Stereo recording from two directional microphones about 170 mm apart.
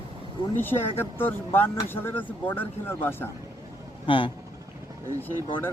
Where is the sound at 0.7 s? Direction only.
25° left (ahead or behind).